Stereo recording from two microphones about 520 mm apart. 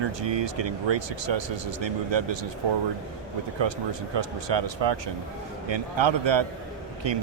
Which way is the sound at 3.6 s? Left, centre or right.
Right.